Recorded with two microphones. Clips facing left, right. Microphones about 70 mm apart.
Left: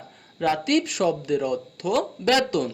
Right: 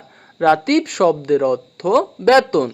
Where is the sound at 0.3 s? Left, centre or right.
Right.